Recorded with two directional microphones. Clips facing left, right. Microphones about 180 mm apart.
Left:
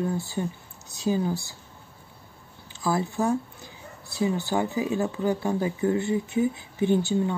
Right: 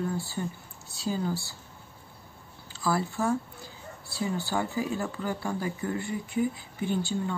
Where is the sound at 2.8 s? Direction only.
20° left (ahead or behind).